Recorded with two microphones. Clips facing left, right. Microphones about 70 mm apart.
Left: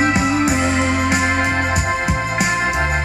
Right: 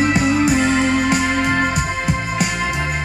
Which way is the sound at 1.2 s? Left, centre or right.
Left.